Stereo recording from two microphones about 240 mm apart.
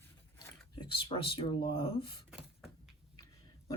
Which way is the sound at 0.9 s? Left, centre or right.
Left.